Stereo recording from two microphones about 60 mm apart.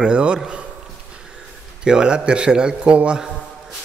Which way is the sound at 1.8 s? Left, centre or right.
Centre.